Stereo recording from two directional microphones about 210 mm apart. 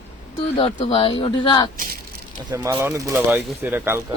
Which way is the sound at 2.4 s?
15° right (ahead or behind).